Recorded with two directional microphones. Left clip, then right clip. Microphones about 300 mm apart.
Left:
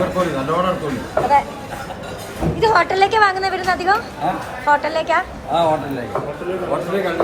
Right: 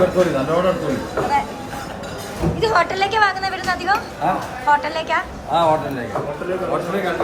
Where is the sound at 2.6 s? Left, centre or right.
Centre.